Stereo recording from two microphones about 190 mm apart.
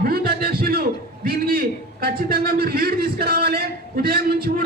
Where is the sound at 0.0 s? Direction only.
50° right (ahead or behind).